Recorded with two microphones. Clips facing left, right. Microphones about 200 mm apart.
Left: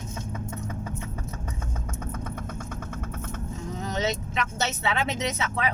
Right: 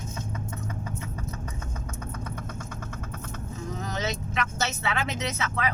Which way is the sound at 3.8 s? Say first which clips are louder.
Left 4 dB; 20° left (ahead or behind).